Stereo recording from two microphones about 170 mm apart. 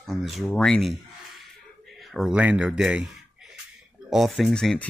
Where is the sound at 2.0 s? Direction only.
Centre (ahead or behind).